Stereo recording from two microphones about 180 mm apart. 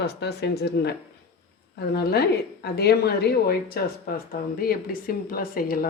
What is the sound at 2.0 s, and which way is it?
A woman's voice, 65° left (ahead or behind).